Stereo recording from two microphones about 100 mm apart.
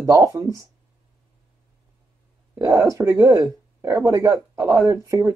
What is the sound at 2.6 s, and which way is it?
Speech, 35° right (ahead or behind).